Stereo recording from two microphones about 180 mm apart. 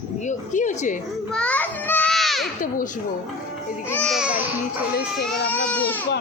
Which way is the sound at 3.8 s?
5° left (ahead or behind).